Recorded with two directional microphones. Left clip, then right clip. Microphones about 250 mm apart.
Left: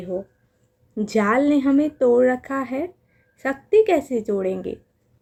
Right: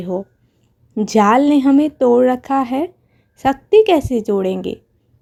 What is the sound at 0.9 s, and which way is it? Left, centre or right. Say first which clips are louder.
A woman's voice: right 7 dB; right.